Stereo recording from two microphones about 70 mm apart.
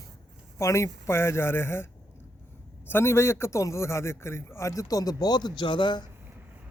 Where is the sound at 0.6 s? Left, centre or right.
Left.